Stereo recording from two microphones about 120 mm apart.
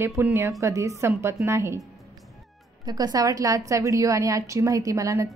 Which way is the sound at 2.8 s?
35° right (ahead or behind).